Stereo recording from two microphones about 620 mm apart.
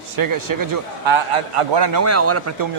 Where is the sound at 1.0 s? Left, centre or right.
Right.